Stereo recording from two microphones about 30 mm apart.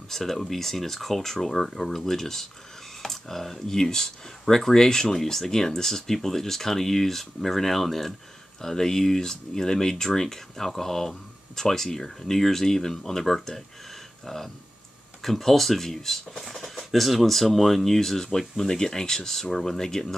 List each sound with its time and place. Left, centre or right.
0.1 s speech: centre
5.1 s speech: centre
8.5 s speech: centre
14.2 s speech: centre